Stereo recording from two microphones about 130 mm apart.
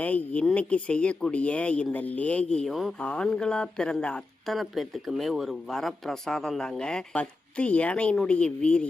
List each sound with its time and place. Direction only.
0.0 s speech: 10° left (ahead or behind)